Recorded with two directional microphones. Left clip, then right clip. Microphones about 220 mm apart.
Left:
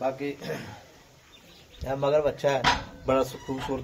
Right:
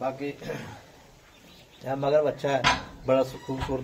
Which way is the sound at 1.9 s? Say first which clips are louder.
Right 1 dB; 35° left (ahead or behind).